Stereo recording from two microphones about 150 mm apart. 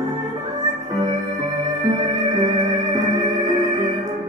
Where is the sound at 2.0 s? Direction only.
25° right (ahead or behind).